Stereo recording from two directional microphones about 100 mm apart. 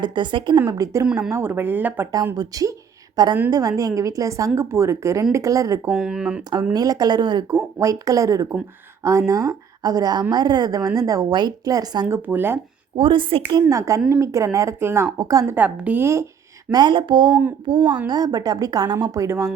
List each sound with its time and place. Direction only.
0.0 s a woman's voice: 50° right (ahead or behind)
0.7 s a woman's voice: 35° right (ahead or behind)
1.0 s a woman's voice: 10° right (ahead or behind)
1.3 s speech: 20° right (ahead or behind)
2.3 s a woman's voice: 40° right (ahead or behind)
5.9 s speech: 5° right (ahead or behind)
6.7 s a woman's voice: 40° right (ahead or behind)
7.4 s a woman's voice: 30° right (ahead or behind)
12.0 s speech: 20° right (ahead or behind)
13.0 s a woman's voice: 60° right (ahead or behind); by 15.5 s 35° right (ahead or behind)
15.5 s a woman's voice: 15° right (ahead or behind)
16.7 s a woman's voice: 55° right (ahead or behind)
18.1 s a woman's voice: 40° right (ahead or behind)